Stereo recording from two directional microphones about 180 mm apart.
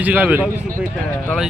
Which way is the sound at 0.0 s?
10° right (ahead or behind).